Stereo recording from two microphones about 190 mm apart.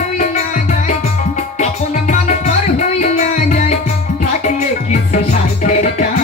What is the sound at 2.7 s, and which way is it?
Music, 40° left (ahead or behind).